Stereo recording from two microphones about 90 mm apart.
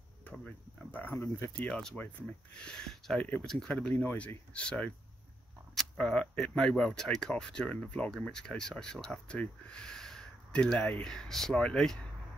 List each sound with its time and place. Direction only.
0.5 s speech: 20° left (ahead or behind)
1.1 s speech: 40° left (ahead or behind)
1.5 s speech: 10° left (ahead or behind)
4.0 s speech: 20° left (ahead or behind); by 12.1 s 5° left (ahead or behind)